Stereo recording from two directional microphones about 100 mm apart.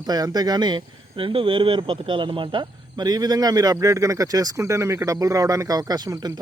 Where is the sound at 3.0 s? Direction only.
40° right (ahead or behind).